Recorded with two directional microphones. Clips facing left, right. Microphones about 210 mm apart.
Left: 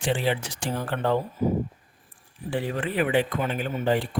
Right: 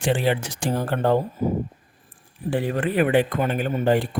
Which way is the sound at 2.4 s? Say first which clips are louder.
Right 5 dB; 50° right (ahead or behind).